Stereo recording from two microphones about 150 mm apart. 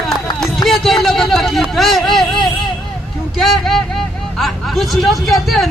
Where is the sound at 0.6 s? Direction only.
Centre (ahead or behind).